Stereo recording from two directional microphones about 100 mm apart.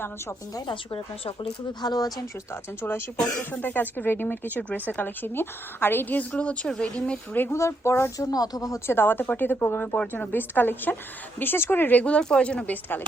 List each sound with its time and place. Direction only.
0.7 s speech: 60° left (ahead or behind)
1.8 s speech: 40° left (ahead or behind)
3.5 s speech: 15° left (ahead or behind)
8.3 s speech: 40° left (ahead or behind)
8.9 s speech: 20° left (ahead or behind)